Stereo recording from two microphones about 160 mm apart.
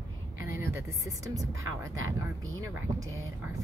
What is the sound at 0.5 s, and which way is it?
Speech, 15° right (ahead or behind).